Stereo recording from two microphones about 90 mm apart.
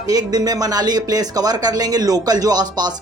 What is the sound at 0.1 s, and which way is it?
Speech, 45° right (ahead or behind).